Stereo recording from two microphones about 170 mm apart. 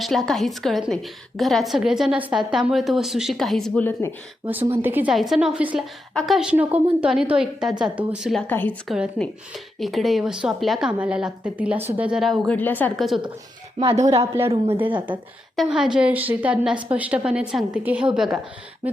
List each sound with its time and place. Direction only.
0.0 s a woman's voice: centre (ahead or behind)
4.4 s a woman's voice: 10° right (ahead or behind)
5.1 s a woman's voice: centre (ahead or behind)
8.4 s a woman's voice: 10° left (ahead or behind)
12.5 s a woman's voice: 10° left (ahead or behind)
14.1 s a woman's voice: 15° right (ahead or behind)
15.5 s a woman's voice: 5° right (ahead or behind)